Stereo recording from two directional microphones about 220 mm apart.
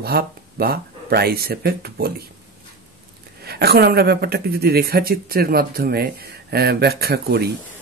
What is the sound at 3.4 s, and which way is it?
A woman's voice, 45° right (ahead or behind).